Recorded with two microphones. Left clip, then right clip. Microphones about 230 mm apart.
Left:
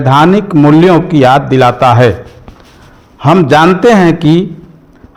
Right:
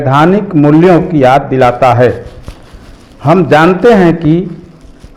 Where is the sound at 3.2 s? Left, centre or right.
Left.